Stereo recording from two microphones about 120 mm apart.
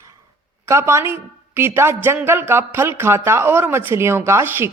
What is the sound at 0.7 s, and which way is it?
Speech, 25° right (ahead or behind).